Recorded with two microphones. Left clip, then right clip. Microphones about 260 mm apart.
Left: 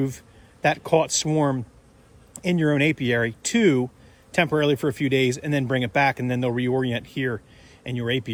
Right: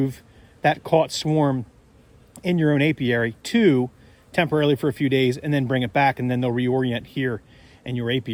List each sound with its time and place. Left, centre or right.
0.6 s speech: right